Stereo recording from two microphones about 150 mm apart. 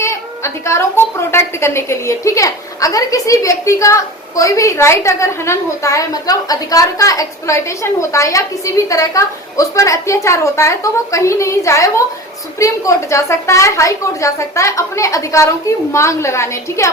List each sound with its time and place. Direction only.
0.0 s a woman's voice: 20° left (ahead or behind)